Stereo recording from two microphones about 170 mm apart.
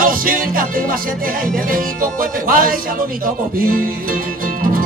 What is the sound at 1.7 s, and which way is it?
Music, 55° right (ahead or behind).